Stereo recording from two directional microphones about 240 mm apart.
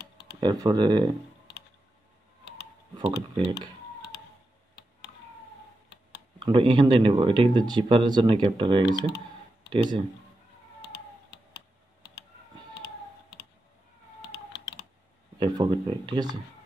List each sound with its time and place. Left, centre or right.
0.0 s tick: left
0.4 s speech: centre
2.4 s a sound: left
3.0 s speech: right
6.4 s speech: right
10.8 s typing: left
14.2 s typing: left
15.3 s speech: centre